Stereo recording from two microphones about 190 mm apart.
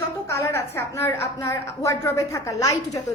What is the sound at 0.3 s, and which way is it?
A woman's voice, 15° left (ahead or behind).